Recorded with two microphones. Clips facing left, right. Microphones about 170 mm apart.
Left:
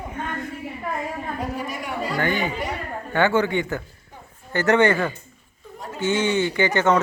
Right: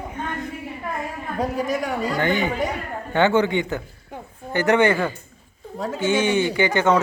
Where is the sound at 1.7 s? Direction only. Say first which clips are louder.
Right 5 dB; 45° right (ahead or behind).